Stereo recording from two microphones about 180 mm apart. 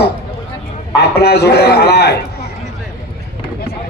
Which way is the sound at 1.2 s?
65° left (ahead or behind).